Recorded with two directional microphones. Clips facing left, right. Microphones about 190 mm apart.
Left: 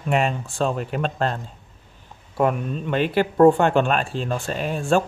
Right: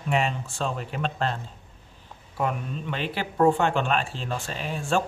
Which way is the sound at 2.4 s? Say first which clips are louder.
Left 7 dB; 55° left (ahead or behind).